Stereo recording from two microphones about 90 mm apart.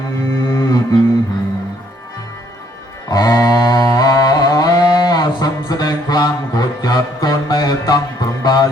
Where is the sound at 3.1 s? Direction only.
45° left (ahead or behind).